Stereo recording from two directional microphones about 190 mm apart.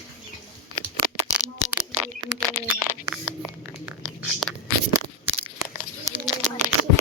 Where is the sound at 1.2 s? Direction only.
5° right (ahead or behind).